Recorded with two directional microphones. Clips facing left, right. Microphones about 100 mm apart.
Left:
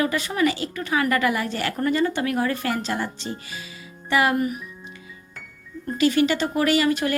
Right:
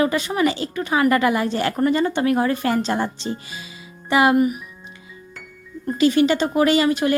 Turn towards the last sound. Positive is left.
turn(degrees=-25)  # may be behind; listen again after turning